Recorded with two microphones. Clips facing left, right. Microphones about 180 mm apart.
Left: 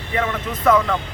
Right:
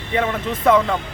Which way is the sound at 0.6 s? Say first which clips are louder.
Right 1 dB; 25° right (ahead or behind).